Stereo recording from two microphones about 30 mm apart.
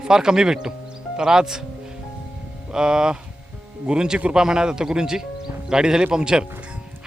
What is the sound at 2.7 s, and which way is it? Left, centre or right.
A man's voice, right.